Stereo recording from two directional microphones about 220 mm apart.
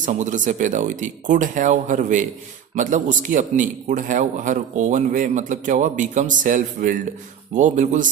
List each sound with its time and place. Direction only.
0.0 s a man's voice: 35° right (ahead or behind)